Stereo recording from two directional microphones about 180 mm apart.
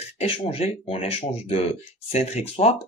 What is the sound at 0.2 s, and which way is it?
Speech, 30° left (ahead or behind).